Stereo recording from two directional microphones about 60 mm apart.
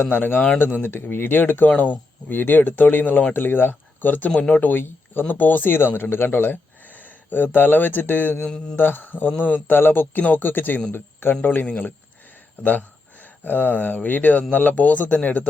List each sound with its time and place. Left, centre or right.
0.0 s speech: left
4.3 s speech: centre
4.6 s speech: left
8.4 s speech: centre
8.8 s speech: left
11.6 s speech: left